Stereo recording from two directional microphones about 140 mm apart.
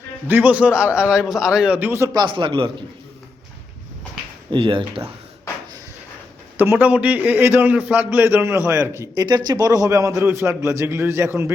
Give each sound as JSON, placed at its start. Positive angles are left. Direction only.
{"t": 0.3, "sound": "a man's voice", "side_deg": -10}
{"t": 2.1, "sound": "a man's voice", "side_deg": -35}
{"t": 4.5, "sound": "a man's voice", "side_deg": -40}
{"t": 6.6, "sound": "a man's voice", "side_deg": -15}